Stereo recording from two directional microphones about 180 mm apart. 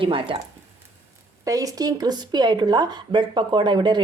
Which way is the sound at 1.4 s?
20° right (ahead or behind).